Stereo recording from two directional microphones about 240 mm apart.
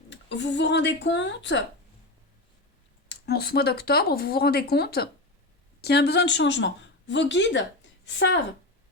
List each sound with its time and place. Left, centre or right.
0.1 s speech: left
3.2 s speech: left